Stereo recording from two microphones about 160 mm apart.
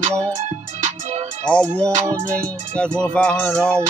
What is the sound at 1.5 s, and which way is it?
Music, 5° left (ahead or behind).